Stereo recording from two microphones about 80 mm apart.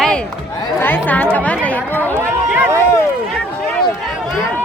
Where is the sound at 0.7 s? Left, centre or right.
Left.